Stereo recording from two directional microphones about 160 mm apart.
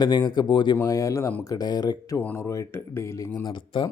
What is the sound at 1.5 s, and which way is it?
Speech, 25° left (ahead or behind).